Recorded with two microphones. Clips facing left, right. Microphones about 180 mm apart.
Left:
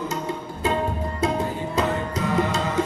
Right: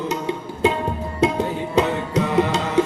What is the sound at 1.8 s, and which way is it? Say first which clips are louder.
Music: right 5 dB; 70° right (ahead or behind).